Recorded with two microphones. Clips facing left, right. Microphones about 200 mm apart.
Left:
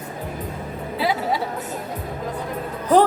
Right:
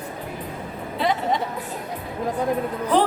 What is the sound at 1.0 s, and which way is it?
Music, 5° left (ahead or behind).